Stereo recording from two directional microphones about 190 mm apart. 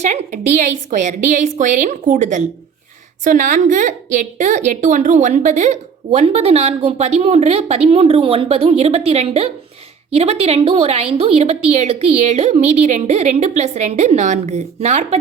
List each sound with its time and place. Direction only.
0.0 s a woman's voice: 40° right (ahead or behind)